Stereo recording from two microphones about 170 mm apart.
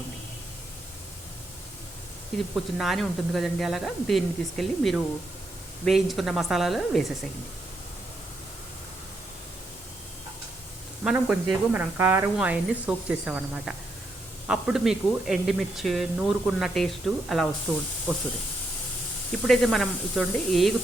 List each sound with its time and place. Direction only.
2.7 s speech: centre (ahead or behind)
11.0 s a woman's voice: 5° right (ahead or behind)
19.3 s speech: centre (ahead or behind)